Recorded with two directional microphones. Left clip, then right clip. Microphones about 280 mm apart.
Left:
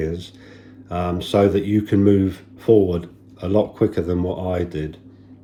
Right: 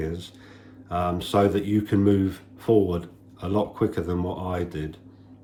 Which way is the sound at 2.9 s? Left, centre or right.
Centre.